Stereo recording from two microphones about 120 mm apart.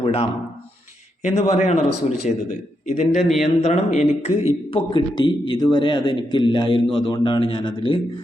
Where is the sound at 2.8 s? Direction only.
80° left.